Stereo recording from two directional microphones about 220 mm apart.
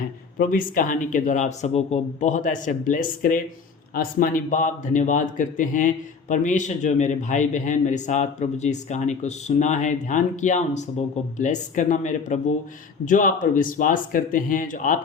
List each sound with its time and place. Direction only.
0.3 s speech: 40° left (ahead or behind)